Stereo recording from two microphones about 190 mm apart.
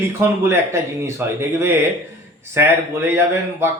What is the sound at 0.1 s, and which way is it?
Speech, 10° right (ahead or behind).